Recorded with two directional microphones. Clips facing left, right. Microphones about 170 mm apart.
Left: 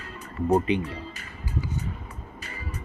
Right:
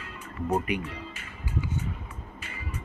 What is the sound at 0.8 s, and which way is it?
Music, 35° left (ahead or behind).